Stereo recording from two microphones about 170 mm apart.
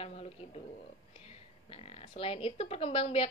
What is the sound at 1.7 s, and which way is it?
A woman's voice, 35° left (ahead or behind).